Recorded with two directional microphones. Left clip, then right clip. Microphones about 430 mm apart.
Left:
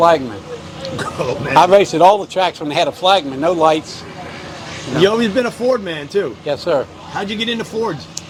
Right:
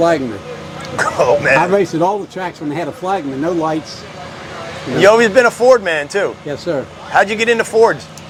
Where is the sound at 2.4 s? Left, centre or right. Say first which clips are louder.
Left 6 dB; left.